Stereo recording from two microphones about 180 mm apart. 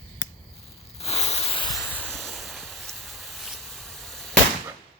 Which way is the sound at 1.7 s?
5° left (ahead or behind).